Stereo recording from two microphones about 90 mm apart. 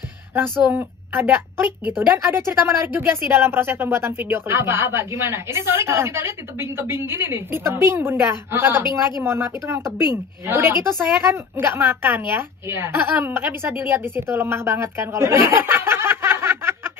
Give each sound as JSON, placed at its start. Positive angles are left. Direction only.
{"t": 0.7, "sound": "a woman's voice", "side_deg": -20}